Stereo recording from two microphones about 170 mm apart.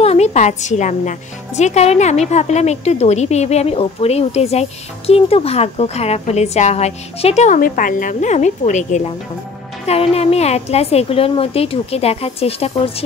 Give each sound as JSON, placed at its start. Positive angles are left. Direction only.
{"t": 0.0, "sound": "a woman's voice", "side_deg": 40}